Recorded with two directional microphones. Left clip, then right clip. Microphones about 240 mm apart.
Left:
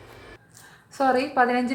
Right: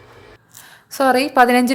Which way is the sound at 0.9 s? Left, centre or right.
Right.